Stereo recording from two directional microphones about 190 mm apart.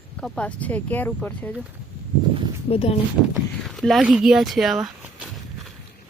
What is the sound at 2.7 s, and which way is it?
Speech, 30° left (ahead or behind).